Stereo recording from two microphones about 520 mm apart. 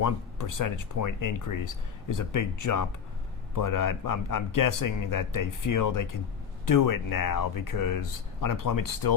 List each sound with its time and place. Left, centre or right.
0.0 s speech: left